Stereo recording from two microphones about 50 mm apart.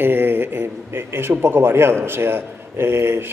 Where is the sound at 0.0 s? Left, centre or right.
Right.